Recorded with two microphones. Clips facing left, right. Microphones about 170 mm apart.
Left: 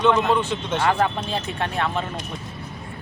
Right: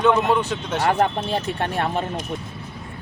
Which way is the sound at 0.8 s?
45° right (ahead or behind).